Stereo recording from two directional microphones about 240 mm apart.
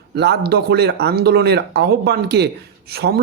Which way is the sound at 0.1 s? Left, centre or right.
Right.